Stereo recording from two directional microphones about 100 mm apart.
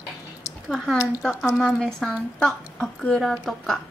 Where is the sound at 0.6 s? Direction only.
5° left (ahead or behind).